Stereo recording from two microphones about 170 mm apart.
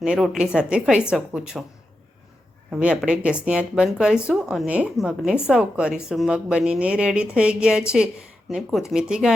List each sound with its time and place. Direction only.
0.0 s speech: 5° right (ahead or behind)
2.7 s speech: 5° right (ahead or behind)